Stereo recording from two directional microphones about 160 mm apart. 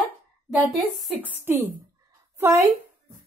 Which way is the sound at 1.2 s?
15° right (ahead or behind).